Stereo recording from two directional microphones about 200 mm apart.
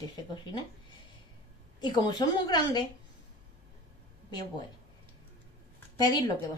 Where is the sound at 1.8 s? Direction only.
20° left (ahead or behind).